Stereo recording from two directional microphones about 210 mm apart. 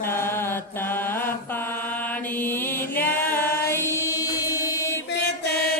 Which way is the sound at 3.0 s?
10° left (ahead or behind).